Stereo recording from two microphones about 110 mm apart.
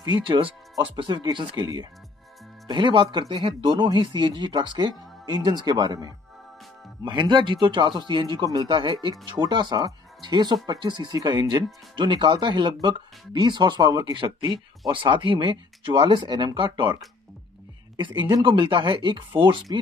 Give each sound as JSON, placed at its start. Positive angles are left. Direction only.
{"t": 0.0, "sound": "speech", "side_deg": -40}
{"t": 1.6, "sound": "speech", "side_deg": -35}
{"t": 2.7, "sound": "speech", "side_deg": -45}
{"t": 3.3, "sound": "speech", "side_deg": -70}
{"t": 3.6, "sound": "speech", "side_deg": -45}